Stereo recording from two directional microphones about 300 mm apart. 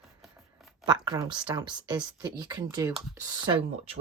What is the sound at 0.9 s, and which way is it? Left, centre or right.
Speech, centre.